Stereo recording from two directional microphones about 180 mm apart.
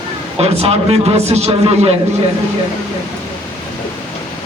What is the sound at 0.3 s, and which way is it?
A man's voice, 35° right (ahead or behind).